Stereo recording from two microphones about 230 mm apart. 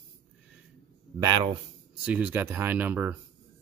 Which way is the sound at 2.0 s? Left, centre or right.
Centre.